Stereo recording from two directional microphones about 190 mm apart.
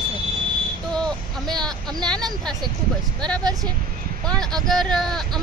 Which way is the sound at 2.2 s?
20° right (ahead or behind).